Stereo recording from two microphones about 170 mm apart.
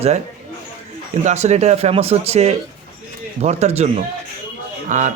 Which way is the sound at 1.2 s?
40° right (ahead or behind).